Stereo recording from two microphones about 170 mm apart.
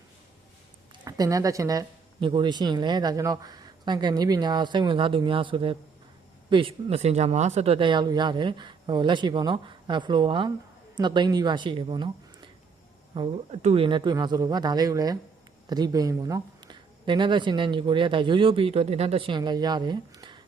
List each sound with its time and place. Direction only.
1.0 s a woman's voice: 20° right (ahead or behind)